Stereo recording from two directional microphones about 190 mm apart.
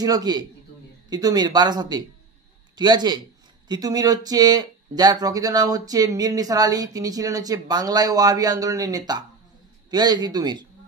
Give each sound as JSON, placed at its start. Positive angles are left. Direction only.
{"t": 0.0, "sound": "speech", "side_deg": -20}